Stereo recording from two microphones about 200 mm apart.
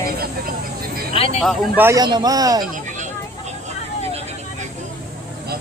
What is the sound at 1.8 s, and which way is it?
Speech, 15° right (ahead or behind).